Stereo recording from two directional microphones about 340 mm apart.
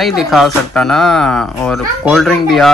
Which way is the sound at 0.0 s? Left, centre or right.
Centre.